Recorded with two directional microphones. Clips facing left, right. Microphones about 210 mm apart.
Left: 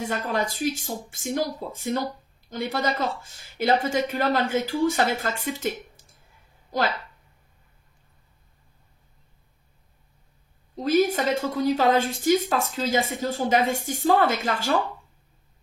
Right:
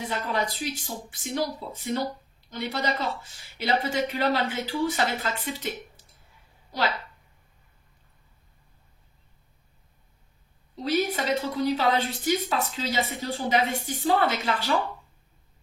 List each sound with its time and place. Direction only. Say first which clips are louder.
0.0 s a woman's voice: left 2 dB; 45° left (ahead or behind)
10.8 s a woman's voice: left 5 dB; 45° left (ahead or behind)